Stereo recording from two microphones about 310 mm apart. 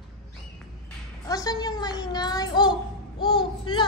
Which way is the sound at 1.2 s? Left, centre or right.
Centre.